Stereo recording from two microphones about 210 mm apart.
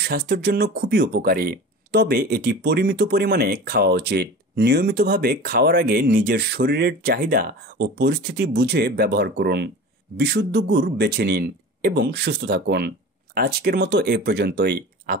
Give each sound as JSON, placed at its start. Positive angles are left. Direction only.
{"t": 0.0, "sound": "speech", "side_deg": -50}